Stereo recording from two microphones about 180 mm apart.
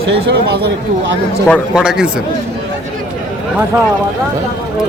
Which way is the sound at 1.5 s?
Centre (ahead or behind).